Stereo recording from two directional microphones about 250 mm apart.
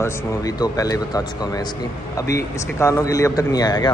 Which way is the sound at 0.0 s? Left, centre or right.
Centre.